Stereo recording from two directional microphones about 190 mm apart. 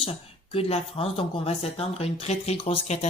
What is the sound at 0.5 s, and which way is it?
Speech, 30° left (ahead or behind).